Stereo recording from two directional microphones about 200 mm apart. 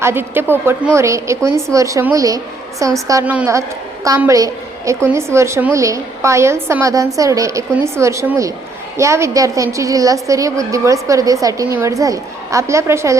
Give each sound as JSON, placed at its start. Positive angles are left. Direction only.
{"t": 0.0, "sound": "a woman's voice", "side_deg": -10}